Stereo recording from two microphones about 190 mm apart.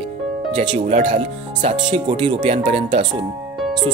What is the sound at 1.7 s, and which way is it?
Speech, 25° right (ahead or behind).